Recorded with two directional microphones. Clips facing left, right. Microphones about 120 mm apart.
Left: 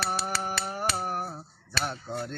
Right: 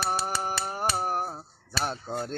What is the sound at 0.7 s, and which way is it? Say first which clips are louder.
Finger snapping: right 4 dB; 40° right (ahead or behind).